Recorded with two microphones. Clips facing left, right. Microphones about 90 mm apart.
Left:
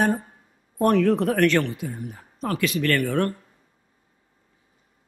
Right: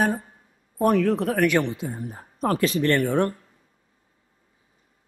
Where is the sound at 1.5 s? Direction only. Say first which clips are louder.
Even; 20° right (ahead or behind).